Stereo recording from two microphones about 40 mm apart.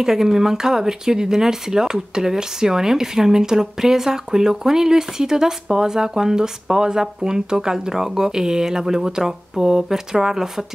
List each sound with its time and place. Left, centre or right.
0.0 s speech: centre